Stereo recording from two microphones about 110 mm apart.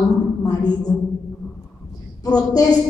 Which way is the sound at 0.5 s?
35° left (ahead or behind).